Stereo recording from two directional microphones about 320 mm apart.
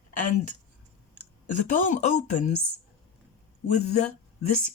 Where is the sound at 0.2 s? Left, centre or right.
Left.